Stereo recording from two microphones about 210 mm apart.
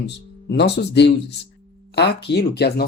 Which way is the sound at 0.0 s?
55° left (ahead or behind).